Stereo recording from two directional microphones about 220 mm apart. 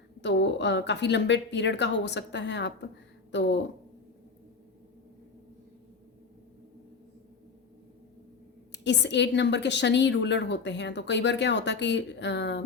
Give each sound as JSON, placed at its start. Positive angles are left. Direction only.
{"t": 0.2, "sound": "a woman's voice", "side_deg": 55}
{"t": 8.7, "sound": "a woman's voice", "side_deg": 50}